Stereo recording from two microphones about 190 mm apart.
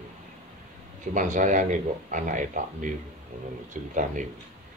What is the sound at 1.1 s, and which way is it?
Speech, 40° right (ahead or behind).